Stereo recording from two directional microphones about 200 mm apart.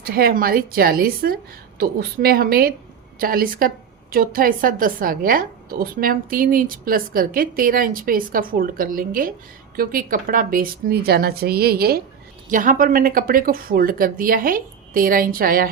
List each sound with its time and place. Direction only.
0.0 s a woman's voice: 45° right (ahead or behind)